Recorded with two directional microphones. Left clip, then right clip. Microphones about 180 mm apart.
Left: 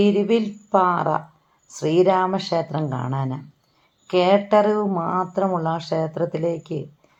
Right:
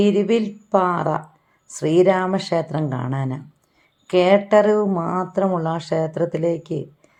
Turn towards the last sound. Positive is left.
turn(degrees=-30)  # may be behind; listen again after turning